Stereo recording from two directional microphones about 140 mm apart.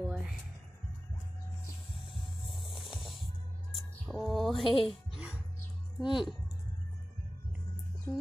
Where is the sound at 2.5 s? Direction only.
Centre (ahead or behind).